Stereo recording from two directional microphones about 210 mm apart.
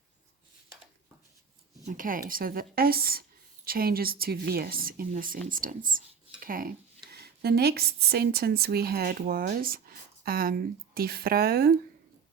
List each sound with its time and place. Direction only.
1.8 s speech: 40° right (ahead or behind)